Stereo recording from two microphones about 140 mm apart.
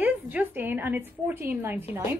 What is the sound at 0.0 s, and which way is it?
A woman's voice, 10° right (ahead or behind).